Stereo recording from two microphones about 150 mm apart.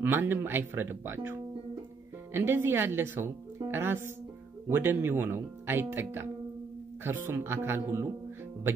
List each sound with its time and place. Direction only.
0.0 s a woman's voice: 15° right (ahead or behind)